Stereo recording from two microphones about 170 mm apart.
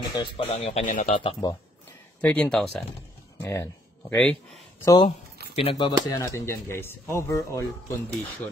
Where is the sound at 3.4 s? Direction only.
15° left (ahead or behind).